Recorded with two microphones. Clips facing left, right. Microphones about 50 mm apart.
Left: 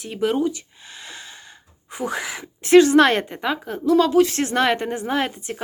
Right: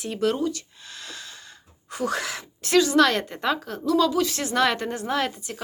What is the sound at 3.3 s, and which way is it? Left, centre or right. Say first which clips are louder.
Speech: left 1 dB; centre.